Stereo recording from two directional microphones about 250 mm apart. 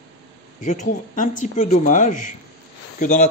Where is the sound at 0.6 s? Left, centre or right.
Left.